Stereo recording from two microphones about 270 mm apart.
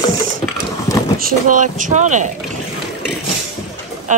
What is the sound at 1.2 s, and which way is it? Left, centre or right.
Speech, right.